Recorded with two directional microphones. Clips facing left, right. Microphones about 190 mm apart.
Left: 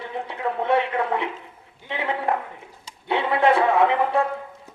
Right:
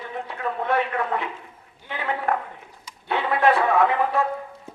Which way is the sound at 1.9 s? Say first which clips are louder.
Left 1 dB; 25° left (ahead or behind).